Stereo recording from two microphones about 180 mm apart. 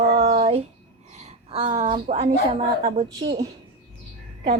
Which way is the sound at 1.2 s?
35° right (ahead or behind).